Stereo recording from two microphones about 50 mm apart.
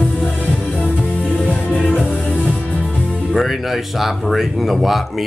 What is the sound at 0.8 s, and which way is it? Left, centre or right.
Music, left.